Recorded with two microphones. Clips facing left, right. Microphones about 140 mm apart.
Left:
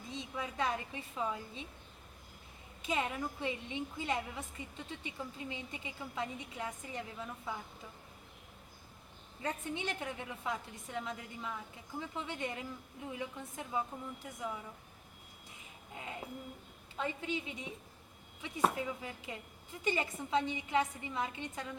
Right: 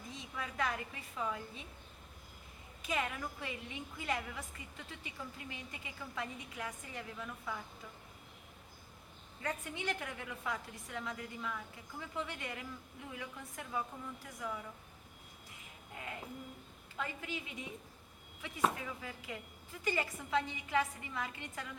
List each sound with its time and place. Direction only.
0.1 s a woman's voice: 25° left (ahead or behind)
2.8 s a woman's voice: 25° left (ahead or behind)
9.4 s a woman's voice: 25° left (ahead or behind)
16.0 s a sound: 20° left (ahead or behind)
17.0 s a woman's voice: 25° left (ahead or behind)
18.8 s a woman's voice: 25° left (ahead or behind)